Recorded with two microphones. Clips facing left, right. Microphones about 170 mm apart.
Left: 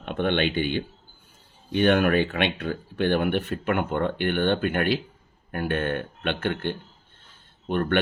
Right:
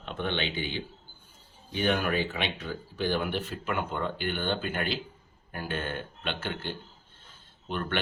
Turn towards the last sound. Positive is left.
turn(degrees=50)  # may be behind; listen again after turning